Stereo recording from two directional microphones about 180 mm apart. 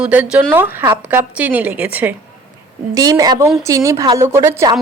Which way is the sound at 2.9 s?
20° right (ahead or behind).